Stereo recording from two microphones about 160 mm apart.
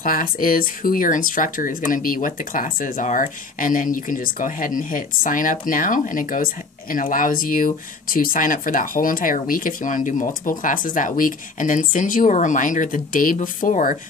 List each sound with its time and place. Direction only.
0.0 s speech: 60° left (ahead or behind)